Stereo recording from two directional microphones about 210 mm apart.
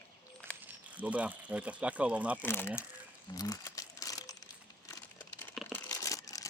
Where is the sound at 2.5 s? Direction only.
10° left (ahead or behind).